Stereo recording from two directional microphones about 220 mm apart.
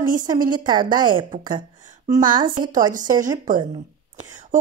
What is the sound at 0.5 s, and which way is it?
Speech, 20° right (ahead or behind).